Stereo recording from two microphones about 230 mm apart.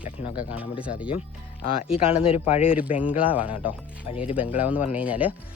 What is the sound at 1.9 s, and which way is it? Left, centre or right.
Speech, left.